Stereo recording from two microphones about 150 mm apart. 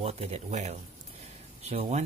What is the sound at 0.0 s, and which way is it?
Speech, 45° right (ahead or behind).